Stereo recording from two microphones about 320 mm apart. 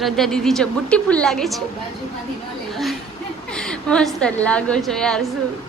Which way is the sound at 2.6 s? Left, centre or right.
Centre.